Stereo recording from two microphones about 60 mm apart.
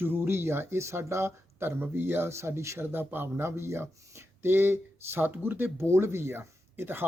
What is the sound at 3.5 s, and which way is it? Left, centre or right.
Speech, right.